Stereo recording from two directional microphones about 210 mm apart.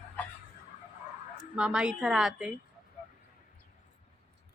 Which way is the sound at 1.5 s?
5° right (ahead or behind).